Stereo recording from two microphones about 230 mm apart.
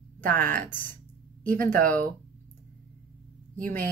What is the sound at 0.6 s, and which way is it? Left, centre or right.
Speech, centre.